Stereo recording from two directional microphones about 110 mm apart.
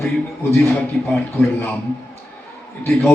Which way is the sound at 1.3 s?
20° left (ahead or behind).